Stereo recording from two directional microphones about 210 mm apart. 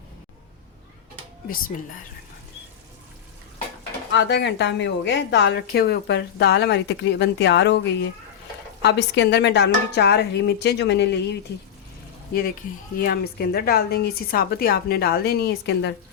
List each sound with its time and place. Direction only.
1.5 s speech: 40° left (ahead or behind)
4.1 s a woman's voice: 55° left (ahead or behind)
8.8 s a woman's voice: 55° left (ahead or behind)
13.0 s a woman's voice: 45° left (ahead or behind)